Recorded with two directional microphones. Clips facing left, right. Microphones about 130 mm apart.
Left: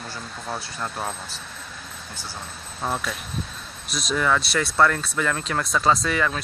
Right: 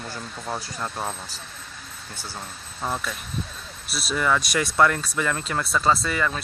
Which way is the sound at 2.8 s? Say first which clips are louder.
Left 1 dB; 5° left (ahead or behind).